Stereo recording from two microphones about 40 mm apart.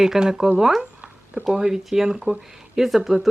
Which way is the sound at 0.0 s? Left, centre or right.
Centre.